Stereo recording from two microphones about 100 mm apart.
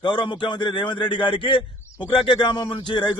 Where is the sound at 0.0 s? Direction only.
50° left (ahead or behind).